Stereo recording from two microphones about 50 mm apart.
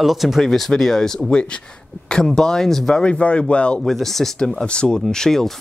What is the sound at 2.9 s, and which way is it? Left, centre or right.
Speech, left.